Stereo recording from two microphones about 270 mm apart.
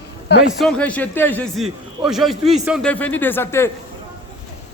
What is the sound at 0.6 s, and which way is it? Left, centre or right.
A man's voice, centre.